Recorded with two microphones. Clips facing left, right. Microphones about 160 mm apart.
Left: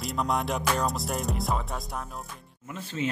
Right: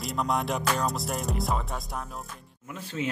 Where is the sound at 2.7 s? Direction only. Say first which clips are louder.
Left 1 dB; 10° right (ahead or behind).